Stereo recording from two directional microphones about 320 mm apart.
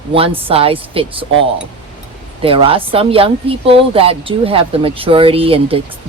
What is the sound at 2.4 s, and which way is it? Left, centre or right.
Speech, centre.